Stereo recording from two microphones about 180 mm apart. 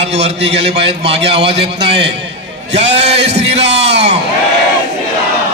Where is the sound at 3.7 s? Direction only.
75° right (ahead or behind).